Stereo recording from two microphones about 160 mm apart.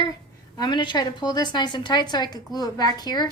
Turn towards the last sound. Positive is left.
turn(degrees=25)  # may be behind; listen again after turning